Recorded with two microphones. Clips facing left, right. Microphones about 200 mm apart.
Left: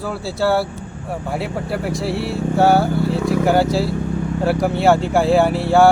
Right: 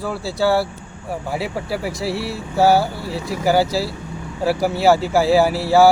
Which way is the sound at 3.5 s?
Centre (ahead or behind).